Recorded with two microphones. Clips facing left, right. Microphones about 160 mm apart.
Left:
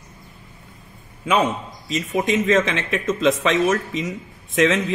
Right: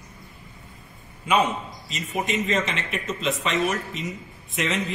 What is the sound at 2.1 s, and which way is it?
Speech, 90° left.